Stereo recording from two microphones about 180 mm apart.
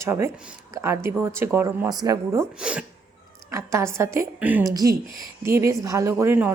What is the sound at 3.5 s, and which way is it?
Speech, 15° right (ahead or behind).